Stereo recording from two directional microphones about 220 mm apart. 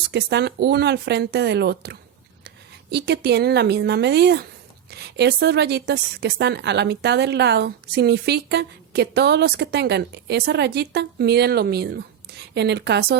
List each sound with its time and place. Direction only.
0.1 s a woman's voice: 50° right (ahead or behind)